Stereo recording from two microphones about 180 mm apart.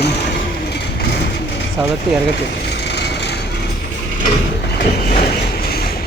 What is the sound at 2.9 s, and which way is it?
Vehicle, 70° left (ahead or behind).